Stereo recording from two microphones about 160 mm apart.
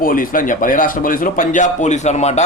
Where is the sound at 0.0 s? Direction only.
60° left (ahead or behind).